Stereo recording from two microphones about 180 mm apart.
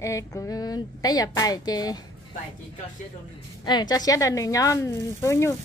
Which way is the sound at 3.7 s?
25° left (ahead or behind).